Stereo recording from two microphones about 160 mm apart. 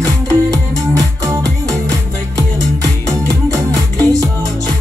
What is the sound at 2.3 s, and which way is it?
Music, 20° right (ahead or behind).